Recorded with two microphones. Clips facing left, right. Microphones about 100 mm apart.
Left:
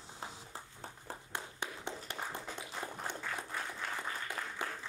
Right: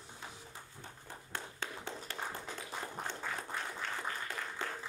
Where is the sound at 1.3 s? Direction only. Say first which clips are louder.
Even; 20° left (ahead or behind).